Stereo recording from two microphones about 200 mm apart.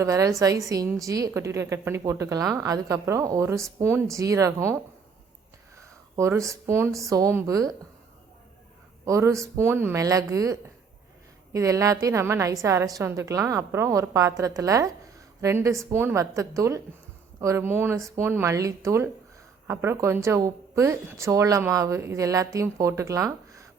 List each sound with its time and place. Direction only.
0.0 s a woman's voice: 15° right (ahead or behind)
6.1 s a woman's voice: 15° right (ahead or behind)
9.0 s a woman's voice: 15° right (ahead or behind)